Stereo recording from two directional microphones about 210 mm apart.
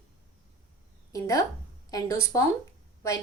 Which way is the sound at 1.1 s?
15° left (ahead or behind).